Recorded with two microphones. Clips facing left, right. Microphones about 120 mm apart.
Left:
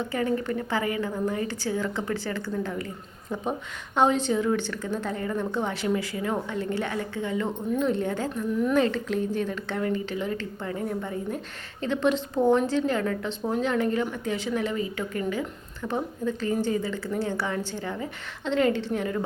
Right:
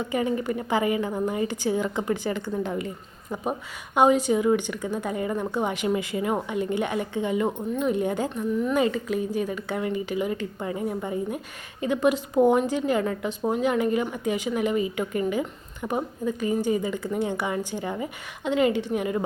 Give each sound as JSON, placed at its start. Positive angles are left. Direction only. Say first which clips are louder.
{"t": 0.0, "sound": "a woman's voice", "louder": "right 1 dB", "side_deg": -15}